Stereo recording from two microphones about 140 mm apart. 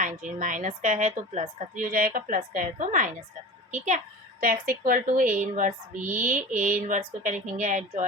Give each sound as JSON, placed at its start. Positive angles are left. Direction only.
{"t": 0.0, "sound": "a woman's voice", "side_deg": -65}